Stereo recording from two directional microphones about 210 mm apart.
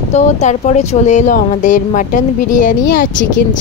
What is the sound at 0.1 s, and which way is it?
Speech, 30° left (ahead or behind).